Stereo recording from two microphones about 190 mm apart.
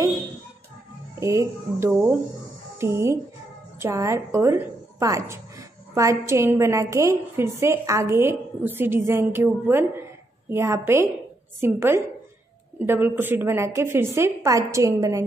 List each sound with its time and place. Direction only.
1.2 s a woman's voice: 15° right (ahead or behind)